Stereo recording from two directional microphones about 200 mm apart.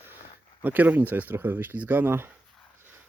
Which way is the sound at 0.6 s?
10° right (ahead or behind).